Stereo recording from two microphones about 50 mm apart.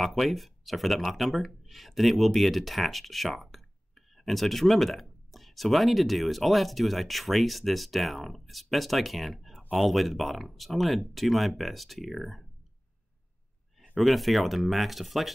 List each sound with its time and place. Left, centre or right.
0.0 s speech: centre
13.9 s speech: centre